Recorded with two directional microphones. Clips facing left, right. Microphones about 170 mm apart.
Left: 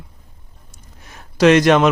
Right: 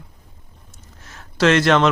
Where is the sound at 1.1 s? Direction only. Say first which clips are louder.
Left 4 dB; 15° left (ahead or behind).